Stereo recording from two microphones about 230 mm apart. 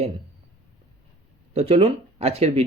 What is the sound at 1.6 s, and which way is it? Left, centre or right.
Speech, right.